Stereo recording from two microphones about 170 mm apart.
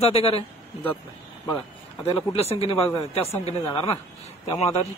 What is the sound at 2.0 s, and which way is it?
Speech, 35° left (ahead or behind).